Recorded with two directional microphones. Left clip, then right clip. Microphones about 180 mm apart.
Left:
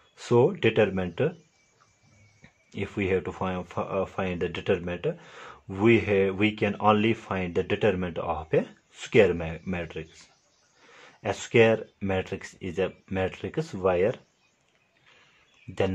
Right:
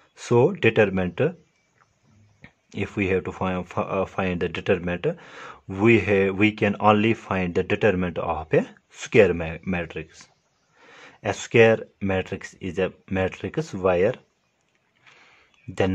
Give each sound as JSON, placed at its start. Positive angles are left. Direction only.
{"t": 0.1, "sound": "speech", "side_deg": -15}
{"t": 2.4, "sound": "speech", "side_deg": -20}
{"t": 15.7, "sound": "speech", "side_deg": -20}